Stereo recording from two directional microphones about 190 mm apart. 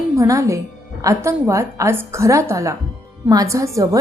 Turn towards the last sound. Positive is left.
turn(degrees=-15)  # may be behind; listen again after turning